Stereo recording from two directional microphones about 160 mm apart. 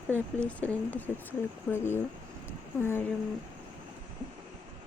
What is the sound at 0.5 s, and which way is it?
Speech, 10° left (ahead or behind).